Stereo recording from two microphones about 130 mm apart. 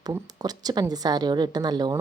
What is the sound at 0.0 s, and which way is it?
A woman's voice, 30° right (ahead or behind).